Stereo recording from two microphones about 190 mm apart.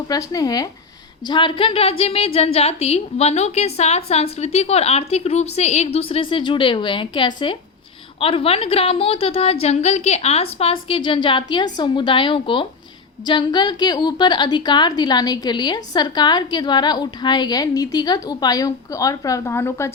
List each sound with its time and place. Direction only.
0.1 s a woman's voice: 20° left (ahead or behind)